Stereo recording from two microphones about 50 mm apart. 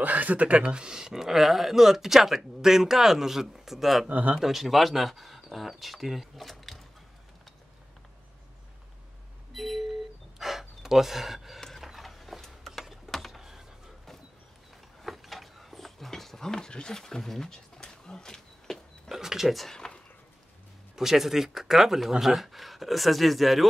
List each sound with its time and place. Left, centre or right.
0.0 s speech: right; by 4.1 s centre
4.1 s speech: right
4.4 s speech: centre
9.5 s a sound: centre
10.4 s gasp: centre
11.8 s ratchet: centre
13.1 s a sound: centre
13.4 s a sound: centre
15.0 s a sound: centre
19.0 s speech: centre
19.6 s speech: centre
20.9 s speech: centre